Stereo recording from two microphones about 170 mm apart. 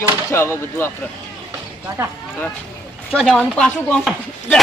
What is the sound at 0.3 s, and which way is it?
Speech, 15° left (ahead or behind).